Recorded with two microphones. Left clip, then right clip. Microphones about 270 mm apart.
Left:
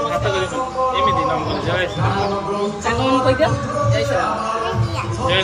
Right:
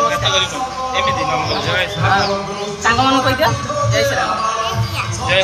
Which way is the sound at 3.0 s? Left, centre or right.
Centre.